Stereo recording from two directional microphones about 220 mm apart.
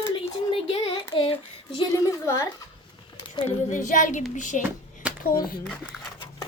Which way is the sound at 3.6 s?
35° left (ahead or behind).